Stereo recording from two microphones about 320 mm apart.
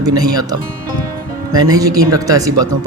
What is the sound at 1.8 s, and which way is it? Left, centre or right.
Speech, centre.